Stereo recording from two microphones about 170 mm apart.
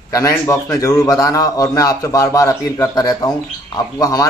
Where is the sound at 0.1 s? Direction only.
20° left (ahead or behind).